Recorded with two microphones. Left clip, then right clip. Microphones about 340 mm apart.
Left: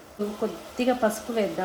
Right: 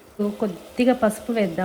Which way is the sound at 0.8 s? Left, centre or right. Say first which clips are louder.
Right 4 dB; right.